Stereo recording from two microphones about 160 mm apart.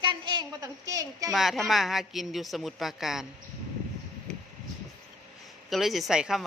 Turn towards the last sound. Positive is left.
turn(degrees=-5)  # may be behind; listen again after turning